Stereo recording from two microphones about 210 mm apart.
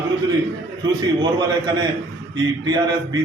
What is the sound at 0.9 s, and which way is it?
A man's voice, 20° right (ahead or behind).